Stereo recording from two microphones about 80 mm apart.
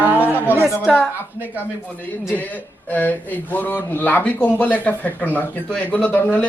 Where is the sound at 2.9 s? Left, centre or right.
Left.